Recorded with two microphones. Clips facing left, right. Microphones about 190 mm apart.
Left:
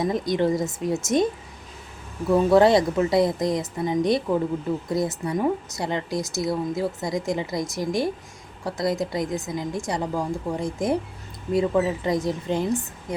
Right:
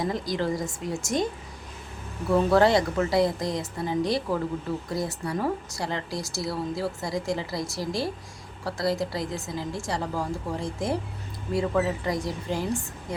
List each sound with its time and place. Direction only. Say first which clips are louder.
0.0 s speech: left 5 dB; 20° left (ahead or behind)
2.5 s speech: left 5 dB; 20° left (ahead or behind)